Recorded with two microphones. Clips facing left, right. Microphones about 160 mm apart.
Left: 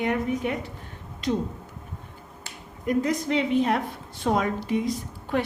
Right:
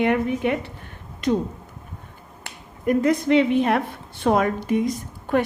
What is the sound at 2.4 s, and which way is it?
A woman's voice, 55° right (ahead or behind).